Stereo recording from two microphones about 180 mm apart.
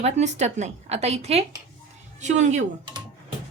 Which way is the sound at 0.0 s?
40° right (ahead or behind).